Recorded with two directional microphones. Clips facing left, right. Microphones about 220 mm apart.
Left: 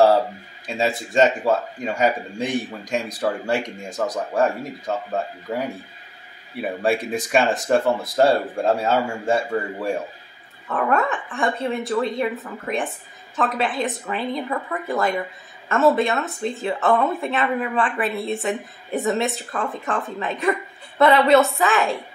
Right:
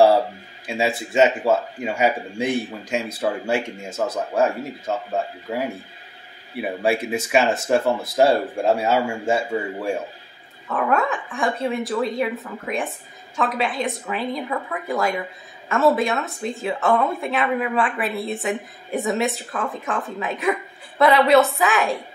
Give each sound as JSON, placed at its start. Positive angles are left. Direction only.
{"t": 0.7, "sound": "a woman's voice", "side_deg": -10}
{"t": 6.8, "sound": "a woman's voice", "side_deg": -5}